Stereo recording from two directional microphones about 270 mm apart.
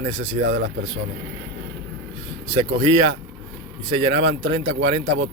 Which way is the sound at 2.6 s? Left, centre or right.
Centre.